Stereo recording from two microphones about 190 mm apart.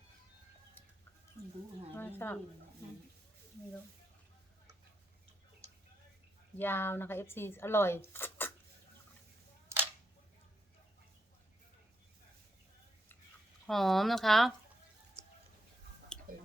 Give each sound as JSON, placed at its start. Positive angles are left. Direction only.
{"t": 2.0, "sound": "speech", "side_deg": 10}
{"t": 6.6, "sound": "speech", "side_deg": 10}
{"t": 13.7, "sound": "speech", "side_deg": 0}
{"t": 16.3, "sound": "a sound", "side_deg": -50}